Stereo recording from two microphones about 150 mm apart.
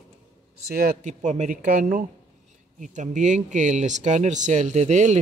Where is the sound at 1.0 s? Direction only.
50° right (ahead or behind).